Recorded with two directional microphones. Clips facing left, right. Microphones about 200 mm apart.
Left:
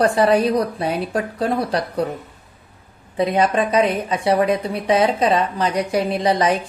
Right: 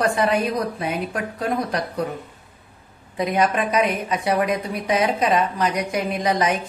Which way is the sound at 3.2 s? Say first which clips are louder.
Left 3 dB; 30° left (ahead or behind).